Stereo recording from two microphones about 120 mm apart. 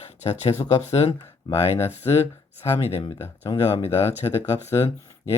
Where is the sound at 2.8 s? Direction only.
50° left (ahead or behind).